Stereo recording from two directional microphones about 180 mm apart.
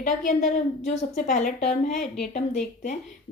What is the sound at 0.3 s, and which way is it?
Speech, 50° left (ahead or behind).